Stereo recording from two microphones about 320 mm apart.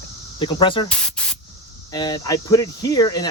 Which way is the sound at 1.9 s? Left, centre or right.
Centre.